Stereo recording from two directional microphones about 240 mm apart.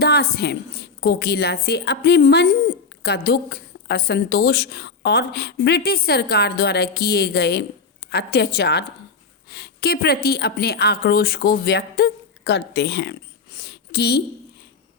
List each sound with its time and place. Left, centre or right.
0.0 s a woman's voice: left